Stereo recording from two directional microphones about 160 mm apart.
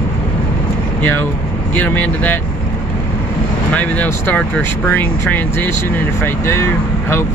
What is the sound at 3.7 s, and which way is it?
Speech, 10° left (ahead or behind).